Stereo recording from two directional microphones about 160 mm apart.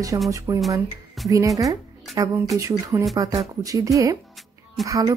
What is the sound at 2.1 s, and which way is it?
Speech, 20° right (ahead or behind).